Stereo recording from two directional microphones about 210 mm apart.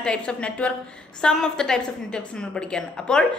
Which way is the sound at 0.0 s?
5° left (ahead or behind).